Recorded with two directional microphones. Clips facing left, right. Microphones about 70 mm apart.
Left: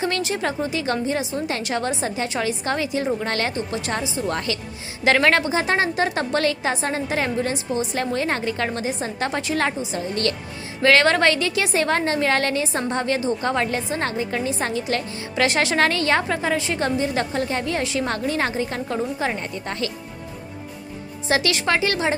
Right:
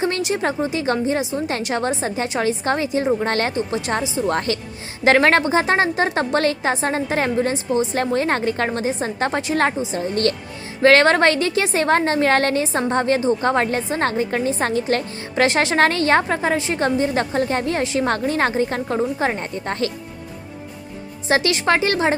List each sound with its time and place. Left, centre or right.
0.0 s a woman's voice: right
4.3 s a woman's voice: right
18.9 s a woman's voice: right
19.4 s a woman's voice: right
21.2 s a woman's voice: right